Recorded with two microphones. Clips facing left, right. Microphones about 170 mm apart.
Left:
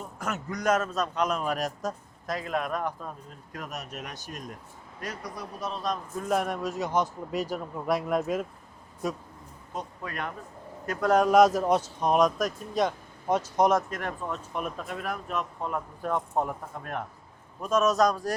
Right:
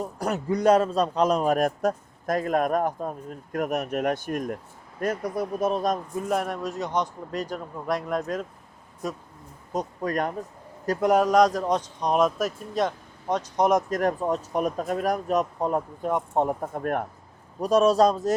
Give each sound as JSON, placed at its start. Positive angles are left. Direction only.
{"t": 0.0, "sound": "a man's voice", "side_deg": -35}
{"t": 6.2, "sound": "a man's voice", "side_deg": 0}
{"t": 9.7, "sound": "speech", "side_deg": -40}
{"t": 11.2, "sound": "a man's voice", "side_deg": 5}
{"t": 13.9, "sound": "speech", "side_deg": -40}
{"t": 16.0, "sound": "speech", "side_deg": -20}
{"t": 16.5, "sound": "a man's voice", "side_deg": -50}
{"t": 17.6, "sound": "speech", "side_deg": -35}